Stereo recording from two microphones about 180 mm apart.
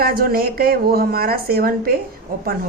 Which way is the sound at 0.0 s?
55° right (ahead or behind).